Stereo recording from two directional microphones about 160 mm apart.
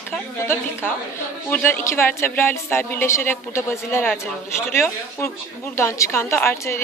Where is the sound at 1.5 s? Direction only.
10° left (ahead or behind).